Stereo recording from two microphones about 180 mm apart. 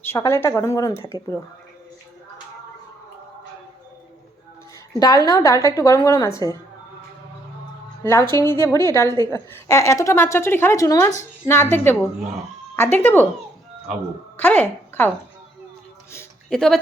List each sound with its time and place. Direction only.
0.0 s a woman's voice: 15° left (ahead or behind)
4.9 s a woman's voice: 20° left (ahead or behind)
8.0 s a woman's voice: 15° left (ahead or behind)
14.3 s a woman's voice: 10° left (ahead or behind)
16.5 s speech: 5° left (ahead or behind)